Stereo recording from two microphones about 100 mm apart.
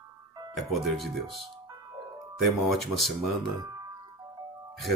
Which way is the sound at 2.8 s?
Centre (ahead or behind).